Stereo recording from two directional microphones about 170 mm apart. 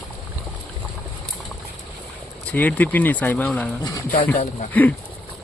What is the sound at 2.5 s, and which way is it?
Speech, 10° left (ahead or behind).